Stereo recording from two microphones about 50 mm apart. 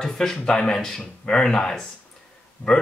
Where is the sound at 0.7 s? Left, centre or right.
Centre.